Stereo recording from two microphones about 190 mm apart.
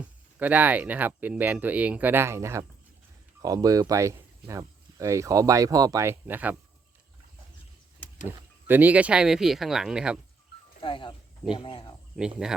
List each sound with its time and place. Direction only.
0.0 s speech: 10° right (ahead or behind)
8.6 s speech: 10° right (ahead or behind)
10.8 s speech: 25° left (ahead or behind)
12.1 s speech: 5° right (ahead or behind)